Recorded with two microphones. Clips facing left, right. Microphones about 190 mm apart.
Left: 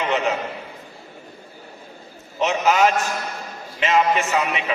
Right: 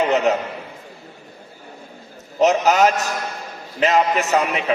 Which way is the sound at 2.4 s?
40° right (ahead or behind).